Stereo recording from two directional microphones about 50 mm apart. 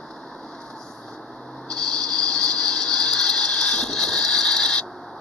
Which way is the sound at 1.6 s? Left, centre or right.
Centre.